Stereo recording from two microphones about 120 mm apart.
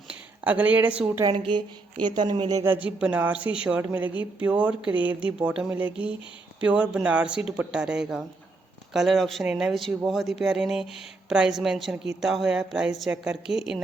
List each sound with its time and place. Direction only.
0.1 s speech: 10° right (ahead or behind)
1.2 s a woman's voice: 45° right (ahead or behind)
2.6 s a woman's voice: 10° right (ahead or behind)